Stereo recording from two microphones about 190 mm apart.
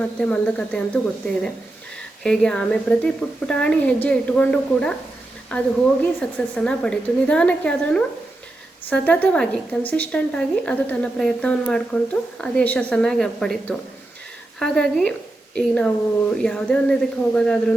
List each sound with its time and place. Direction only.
0.0 s a woman's voice: 5° left (ahead or behind)
2.2 s a woman's voice: 5° left (ahead or behind)